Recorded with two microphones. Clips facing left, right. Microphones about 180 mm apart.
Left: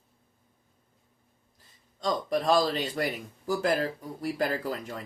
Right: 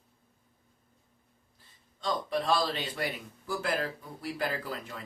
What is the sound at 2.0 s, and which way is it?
Speech, 40° left (ahead or behind).